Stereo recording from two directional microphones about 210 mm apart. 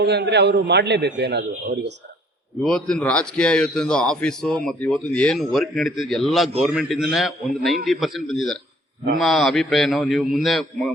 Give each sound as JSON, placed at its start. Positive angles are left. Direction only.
{"t": 0.0, "sound": "a man's voice", "side_deg": -50}
{"t": 2.6, "sound": "a man's voice", "side_deg": 5}